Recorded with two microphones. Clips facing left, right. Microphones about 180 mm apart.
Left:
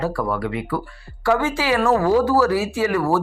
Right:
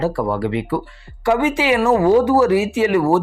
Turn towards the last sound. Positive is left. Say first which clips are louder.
# right 4 dB
turn(degrees=-20)  # may be behind; listen again after turning